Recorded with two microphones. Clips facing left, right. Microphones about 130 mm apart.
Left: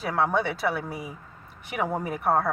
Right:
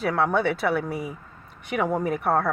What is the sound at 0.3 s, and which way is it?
Speech, centre (ahead or behind).